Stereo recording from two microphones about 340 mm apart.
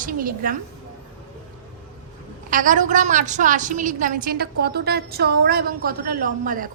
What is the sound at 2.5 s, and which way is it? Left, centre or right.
A woman's voice, right.